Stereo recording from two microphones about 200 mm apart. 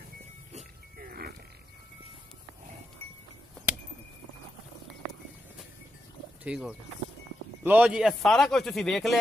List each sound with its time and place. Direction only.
0.5 s music: 35° right (ahead or behind)
6.4 s speech: 5° right (ahead or behind)